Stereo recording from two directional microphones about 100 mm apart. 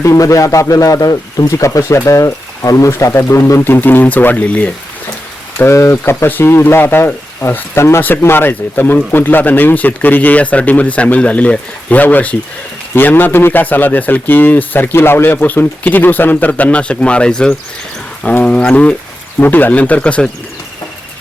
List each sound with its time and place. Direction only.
0.0 s speech: 30° left (ahead or behind); by 4.7 s 15° left (ahead or behind)
5.5 s speech: 25° left (ahead or behind); by 20.3 s 10° left (ahead or behind)